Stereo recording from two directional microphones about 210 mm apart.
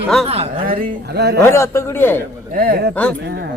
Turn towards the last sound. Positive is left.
turn(degrees=5)  # may be behind; listen again after turning